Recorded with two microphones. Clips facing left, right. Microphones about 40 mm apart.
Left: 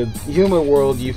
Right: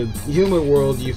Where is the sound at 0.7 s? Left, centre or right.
Centre.